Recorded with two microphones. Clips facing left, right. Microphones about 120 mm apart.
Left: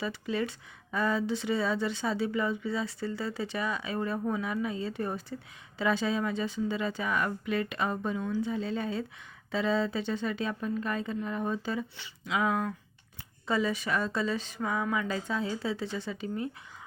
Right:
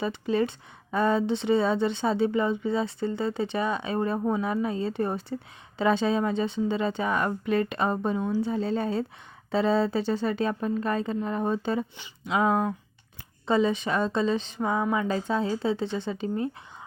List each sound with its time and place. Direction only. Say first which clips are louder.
0.0 s speech: right 6 dB; 30° right (ahead or behind)
13.5 s speech: right 5 dB; 25° right (ahead or behind)